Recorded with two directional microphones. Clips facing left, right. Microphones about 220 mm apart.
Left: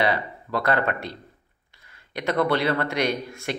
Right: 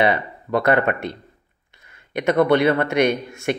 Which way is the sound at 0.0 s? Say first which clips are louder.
Right 4 dB; 20° right (ahead or behind).